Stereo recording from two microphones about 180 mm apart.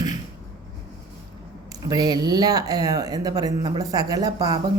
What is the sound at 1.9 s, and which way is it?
Speech, 20° right (ahead or behind).